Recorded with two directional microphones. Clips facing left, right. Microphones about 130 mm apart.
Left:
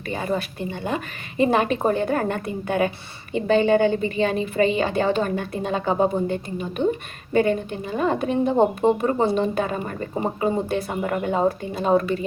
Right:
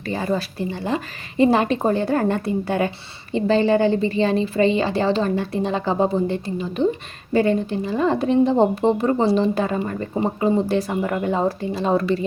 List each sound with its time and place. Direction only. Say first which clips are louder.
0.0 s a woman's voice: right 2 dB; 35° right (ahead or behind)